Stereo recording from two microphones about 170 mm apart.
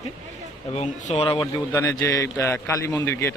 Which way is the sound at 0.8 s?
40° left (ahead or behind).